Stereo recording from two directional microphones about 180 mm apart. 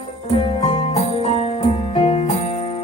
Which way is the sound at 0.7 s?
35° left (ahead or behind).